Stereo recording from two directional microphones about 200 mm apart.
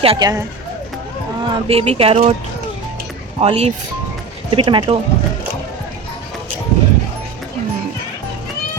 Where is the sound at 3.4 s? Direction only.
30° right (ahead or behind).